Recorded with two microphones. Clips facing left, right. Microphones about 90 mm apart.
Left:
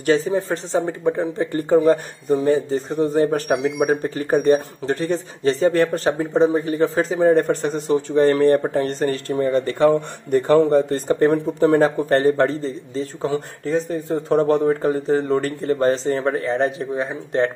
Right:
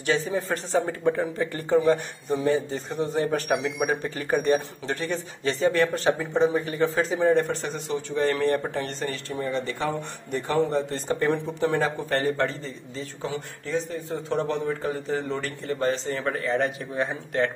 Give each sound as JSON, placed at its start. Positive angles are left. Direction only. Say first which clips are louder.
{"t": 0.0, "sound": "speech", "louder": "left 7 dB", "side_deg": 40}
{"t": 1.4, "sound": "speech", "louder": "left 6 dB", "side_deg": 30}
{"t": 16.9, "sound": "speech", "louder": "left 3 dB", "side_deg": 15}